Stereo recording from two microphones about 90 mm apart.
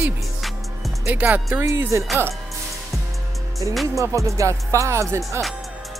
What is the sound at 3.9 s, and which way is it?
Speech, 35° right (ahead or behind).